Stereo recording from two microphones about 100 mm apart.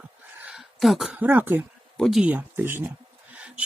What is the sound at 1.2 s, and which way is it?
Speech, 20° right (ahead or behind).